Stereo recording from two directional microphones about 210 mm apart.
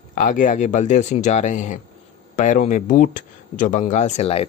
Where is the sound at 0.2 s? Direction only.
40° left (ahead or behind).